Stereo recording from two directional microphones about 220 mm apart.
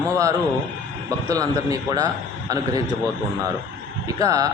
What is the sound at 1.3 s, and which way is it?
A man's voice, 15° right (ahead or behind).